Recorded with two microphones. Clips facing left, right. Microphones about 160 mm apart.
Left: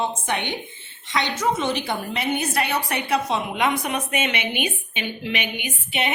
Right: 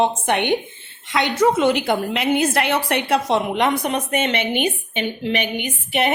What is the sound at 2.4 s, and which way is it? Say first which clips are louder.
Speech: right 5 dB; 90° right.